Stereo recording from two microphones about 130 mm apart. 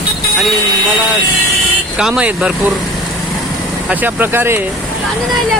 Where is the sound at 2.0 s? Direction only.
5° right (ahead or behind).